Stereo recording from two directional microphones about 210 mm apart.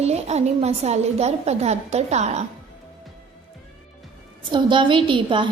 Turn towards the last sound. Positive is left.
turn(degrees=-25)  # may be behind; listen again after turning